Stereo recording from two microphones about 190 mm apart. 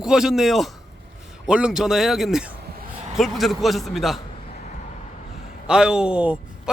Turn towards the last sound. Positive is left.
turn(degrees=-5)  # may be behind; listen again after turning